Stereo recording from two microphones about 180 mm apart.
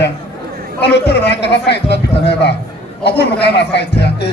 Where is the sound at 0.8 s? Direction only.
65° left (ahead or behind).